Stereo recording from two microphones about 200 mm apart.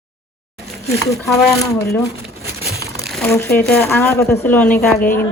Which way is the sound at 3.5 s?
10° left (ahead or behind).